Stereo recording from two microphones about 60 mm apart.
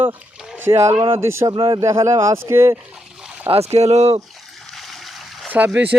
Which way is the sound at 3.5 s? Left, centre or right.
Right.